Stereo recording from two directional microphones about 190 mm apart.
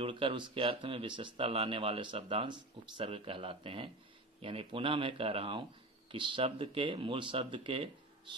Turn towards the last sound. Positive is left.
turn(degrees=-30)  # may be behind; listen again after turning